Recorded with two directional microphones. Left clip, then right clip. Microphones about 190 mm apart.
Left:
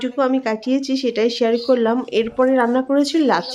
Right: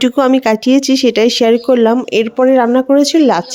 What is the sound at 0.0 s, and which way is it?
Speech, 50° right (ahead or behind).